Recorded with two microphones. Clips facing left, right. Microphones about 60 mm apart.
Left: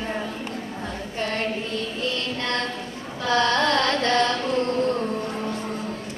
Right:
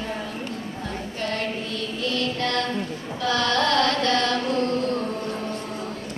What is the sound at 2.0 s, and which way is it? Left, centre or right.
Music, left.